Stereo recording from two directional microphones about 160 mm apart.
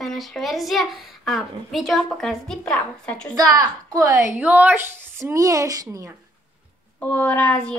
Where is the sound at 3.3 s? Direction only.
25° right (ahead or behind).